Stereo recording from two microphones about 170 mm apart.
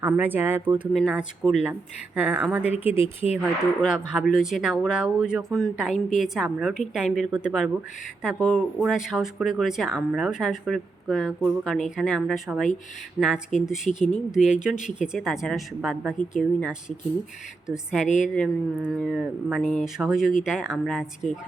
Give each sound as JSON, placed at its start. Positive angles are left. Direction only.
{"t": 0.0, "sound": "speech", "side_deg": -10}
{"t": 3.4, "sound": "speech", "side_deg": 0}